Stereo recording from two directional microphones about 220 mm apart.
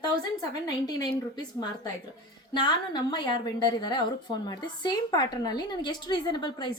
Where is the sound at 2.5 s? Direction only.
20° left (ahead or behind).